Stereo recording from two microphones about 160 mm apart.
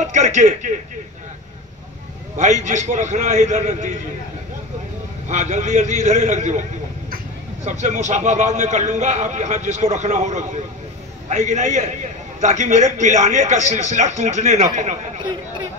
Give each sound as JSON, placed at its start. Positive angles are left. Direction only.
{"t": 0.0, "sound": "radio", "side_deg": -50}
{"t": 2.3, "sound": "a man's voice", "side_deg": -50}
{"t": 5.3, "sound": "a man's voice", "side_deg": -50}
{"t": 7.8, "sound": "a man's voice", "side_deg": -50}